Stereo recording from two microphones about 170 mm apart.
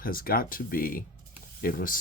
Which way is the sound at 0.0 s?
60° left (ahead or behind).